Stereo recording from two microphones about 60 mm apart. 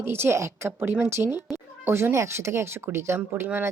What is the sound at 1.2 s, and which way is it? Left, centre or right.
Speech, right.